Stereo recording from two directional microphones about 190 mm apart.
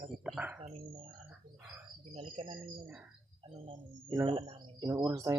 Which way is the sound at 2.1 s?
30° right (ahead or behind).